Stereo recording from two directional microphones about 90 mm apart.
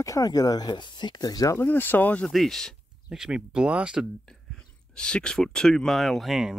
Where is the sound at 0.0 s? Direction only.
40° left (ahead or behind).